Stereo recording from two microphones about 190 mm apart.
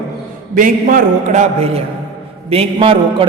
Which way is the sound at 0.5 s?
45° right (ahead or behind).